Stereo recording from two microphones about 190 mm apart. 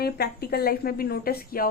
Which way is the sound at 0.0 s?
55° left (ahead or behind).